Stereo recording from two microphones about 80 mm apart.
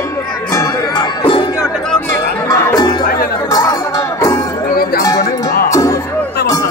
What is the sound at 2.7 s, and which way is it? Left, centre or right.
Music, left.